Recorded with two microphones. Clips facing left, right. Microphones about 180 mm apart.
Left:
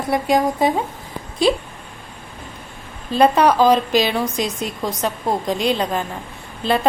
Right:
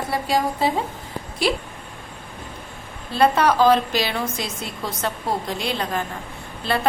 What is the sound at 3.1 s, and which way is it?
A woman's voice, 15° left (ahead or behind).